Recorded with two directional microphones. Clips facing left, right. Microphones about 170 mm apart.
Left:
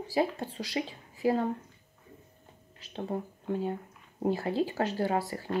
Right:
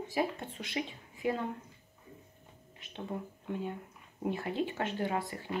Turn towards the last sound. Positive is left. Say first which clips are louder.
# left 4 dB
turn(degrees=35)  # may be behind; listen again after turning